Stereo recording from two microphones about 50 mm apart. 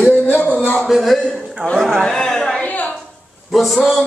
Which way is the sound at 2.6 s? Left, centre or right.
Left.